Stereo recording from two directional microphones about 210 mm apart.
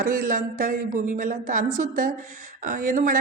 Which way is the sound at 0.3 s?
40° right (ahead or behind).